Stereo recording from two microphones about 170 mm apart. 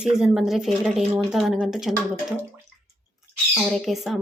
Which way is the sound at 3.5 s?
Centre (ahead or behind).